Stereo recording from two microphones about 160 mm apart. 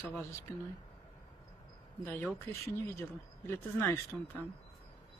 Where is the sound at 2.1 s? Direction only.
10° left (ahead or behind).